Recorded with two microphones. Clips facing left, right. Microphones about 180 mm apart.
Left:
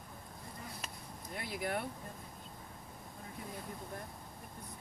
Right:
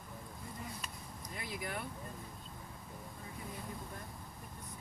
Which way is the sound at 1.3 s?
60° left (ahead or behind).